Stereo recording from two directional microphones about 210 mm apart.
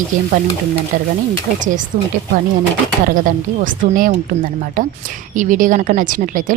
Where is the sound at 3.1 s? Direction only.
40° right (ahead or behind).